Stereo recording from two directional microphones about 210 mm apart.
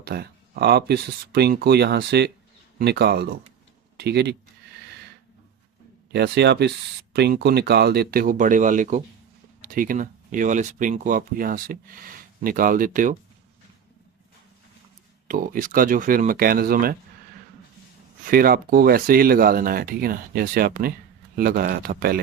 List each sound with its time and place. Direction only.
0.0 s speech: 45° right (ahead or behind)
6.1 s speech: 50° right (ahead or behind)
15.3 s speech: 40° right (ahead or behind)
18.3 s speech: 45° right (ahead or behind)